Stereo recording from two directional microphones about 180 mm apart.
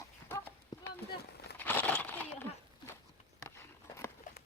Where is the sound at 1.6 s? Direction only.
10° left (ahead or behind).